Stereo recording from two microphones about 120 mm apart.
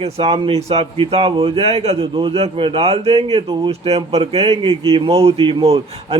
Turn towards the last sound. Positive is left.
turn(degrees=-55)  # may be behind; listen again after turning